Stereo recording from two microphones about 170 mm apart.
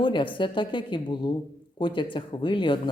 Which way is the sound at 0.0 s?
30° left (ahead or behind).